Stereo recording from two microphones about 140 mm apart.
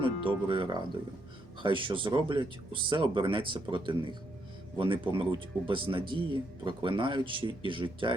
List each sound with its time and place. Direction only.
0.0 s speech: 35° right (ahead or behind)